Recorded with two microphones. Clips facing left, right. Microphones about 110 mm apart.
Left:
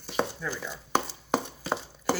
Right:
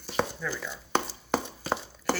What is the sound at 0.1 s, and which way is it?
Chopping, 10° left (ahead or behind).